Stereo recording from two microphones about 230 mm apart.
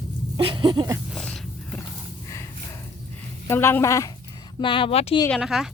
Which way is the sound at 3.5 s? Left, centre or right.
Centre.